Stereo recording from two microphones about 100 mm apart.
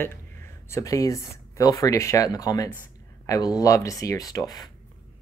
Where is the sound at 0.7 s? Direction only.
35° left (ahead or behind).